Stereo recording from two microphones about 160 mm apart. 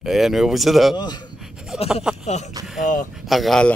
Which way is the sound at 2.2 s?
45° left (ahead or behind).